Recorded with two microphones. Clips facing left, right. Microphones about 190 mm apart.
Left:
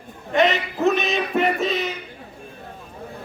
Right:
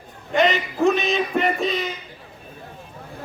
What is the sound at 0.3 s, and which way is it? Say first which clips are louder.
Speech: even; centre (ahead or behind).